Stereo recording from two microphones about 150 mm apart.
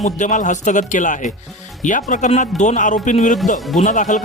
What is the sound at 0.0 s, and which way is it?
A man's voice, 55° left (ahead or behind).